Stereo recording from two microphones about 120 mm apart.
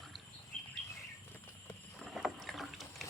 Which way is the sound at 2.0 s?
Centre (ahead or behind).